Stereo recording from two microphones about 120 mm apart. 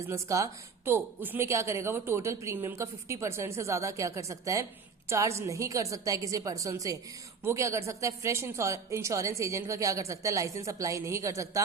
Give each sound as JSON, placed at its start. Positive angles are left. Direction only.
{"t": 0.1, "sound": "speech", "side_deg": -25}